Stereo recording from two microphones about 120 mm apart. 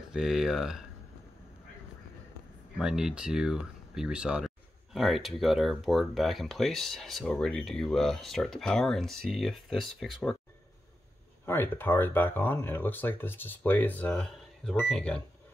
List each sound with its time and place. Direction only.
0.1 s speech: 5° right (ahead or behind)
2.8 s speech: 5° right (ahead or behind)
11.4 s speech: 20° left (ahead or behind)